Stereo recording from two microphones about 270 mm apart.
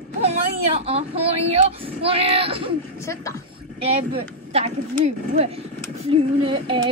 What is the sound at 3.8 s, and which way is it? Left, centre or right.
A woman's voice, right.